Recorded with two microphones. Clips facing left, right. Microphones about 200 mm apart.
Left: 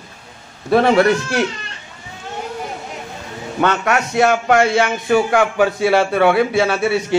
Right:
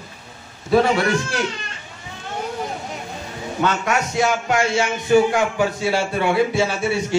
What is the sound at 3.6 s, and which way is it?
A man's voice, 65° left (ahead or behind).